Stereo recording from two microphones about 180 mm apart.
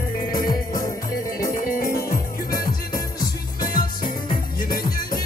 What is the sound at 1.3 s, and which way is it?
Music, 50° left (ahead or behind).